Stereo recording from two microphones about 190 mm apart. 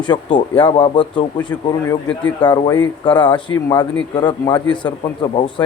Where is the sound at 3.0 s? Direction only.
25° left (ahead or behind).